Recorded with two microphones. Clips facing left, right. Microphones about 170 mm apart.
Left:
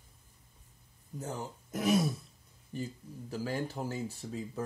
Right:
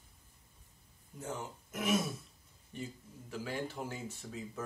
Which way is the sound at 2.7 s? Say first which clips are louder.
Left 5 dB; 35° left (ahead or behind).